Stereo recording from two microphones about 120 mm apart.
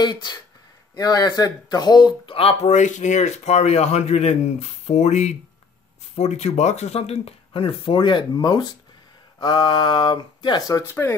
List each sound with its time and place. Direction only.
0.0 s speech: 35° left (ahead or behind)
2.3 s speech: 60° left (ahead or behind); by 10.9 s 30° left (ahead or behind)